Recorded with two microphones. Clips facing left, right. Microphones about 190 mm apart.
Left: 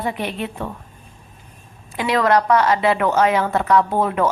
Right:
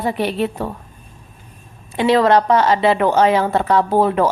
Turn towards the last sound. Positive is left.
turn(degrees=-30)  # may be behind; listen again after turning